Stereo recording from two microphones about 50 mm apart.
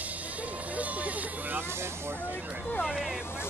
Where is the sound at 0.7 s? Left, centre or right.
Right.